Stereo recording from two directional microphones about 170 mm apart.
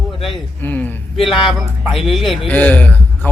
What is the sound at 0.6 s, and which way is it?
Speech, 10° left (ahead or behind).